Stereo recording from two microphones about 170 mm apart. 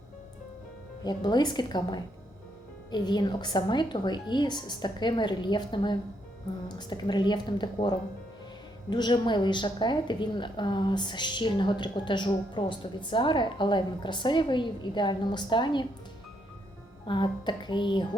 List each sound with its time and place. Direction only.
1.0 s a woman's voice: 25° left (ahead or behind)
17.1 s a woman's voice: 25° left (ahead or behind)